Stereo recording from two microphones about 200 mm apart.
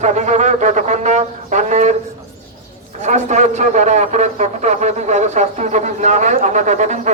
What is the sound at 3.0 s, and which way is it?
A man's voice, 35° right (ahead or behind).